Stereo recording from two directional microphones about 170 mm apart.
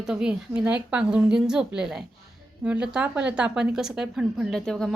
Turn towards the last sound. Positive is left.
turn(degrees=0)  # may be behind; listen again after turning